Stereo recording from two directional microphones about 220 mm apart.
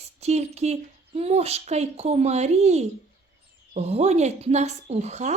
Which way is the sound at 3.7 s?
30° right (ahead or behind).